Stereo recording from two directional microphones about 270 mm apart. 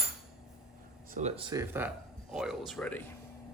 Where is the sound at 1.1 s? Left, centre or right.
Right.